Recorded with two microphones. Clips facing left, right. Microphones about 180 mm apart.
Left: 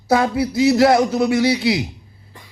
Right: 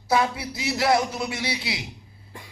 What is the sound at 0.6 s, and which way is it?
A man's voice, 25° left (ahead or behind).